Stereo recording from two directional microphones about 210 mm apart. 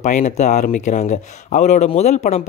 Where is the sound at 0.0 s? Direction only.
35° left (ahead or behind).